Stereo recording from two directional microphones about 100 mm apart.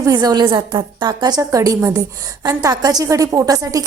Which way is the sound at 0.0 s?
40° right (ahead or behind).